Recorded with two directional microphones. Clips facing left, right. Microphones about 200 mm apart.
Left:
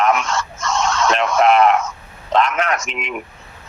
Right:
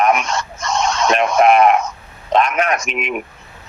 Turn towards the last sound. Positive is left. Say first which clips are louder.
# right 3 dB
turn(degrees=-20)  # may be behind; listen again after turning